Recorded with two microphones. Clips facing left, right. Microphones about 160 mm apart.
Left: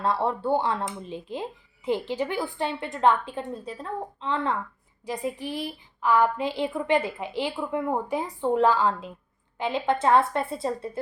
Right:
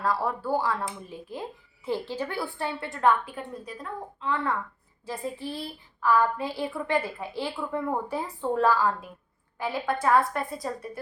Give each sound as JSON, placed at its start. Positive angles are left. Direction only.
{"t": 0.0, "sound": "speech", "side_deg": 25}
{"t": 5.0, "sound": "speech", "side_deg": 15}